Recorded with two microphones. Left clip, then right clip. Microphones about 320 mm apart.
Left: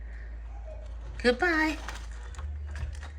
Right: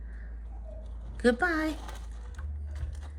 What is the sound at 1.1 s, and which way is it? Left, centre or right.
Speech, centre.